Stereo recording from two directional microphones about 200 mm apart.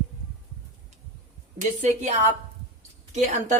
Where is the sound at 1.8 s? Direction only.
35° right (ahead or behind).